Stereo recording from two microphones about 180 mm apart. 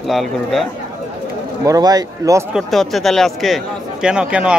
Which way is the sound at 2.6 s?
Centre (ahead or behind).